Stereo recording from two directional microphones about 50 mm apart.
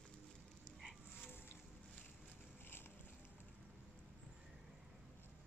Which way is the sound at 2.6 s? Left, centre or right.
Left.